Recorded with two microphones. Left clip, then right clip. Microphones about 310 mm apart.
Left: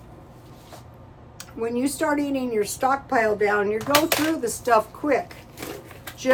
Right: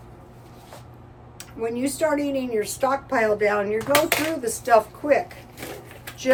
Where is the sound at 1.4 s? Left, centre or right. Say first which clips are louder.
Left 1 dB; centre.